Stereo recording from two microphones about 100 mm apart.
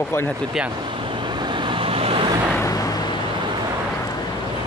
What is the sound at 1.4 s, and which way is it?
Vehicle, 55° right (ahead or behind).